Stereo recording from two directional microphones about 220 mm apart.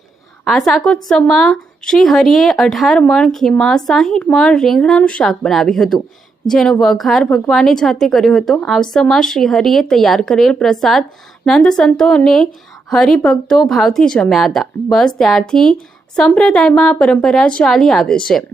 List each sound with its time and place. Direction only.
0.4 s speech: centre (ahead or behind)